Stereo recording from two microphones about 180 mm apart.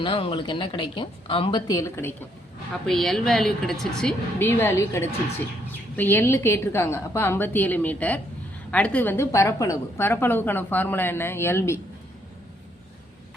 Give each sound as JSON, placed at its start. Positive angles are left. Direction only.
{"t": 0.0, "sound": "a woman's voice", "side_deg": 30}
{"t": 2.8, "sound": "a woman's voice", "side_deg": 0}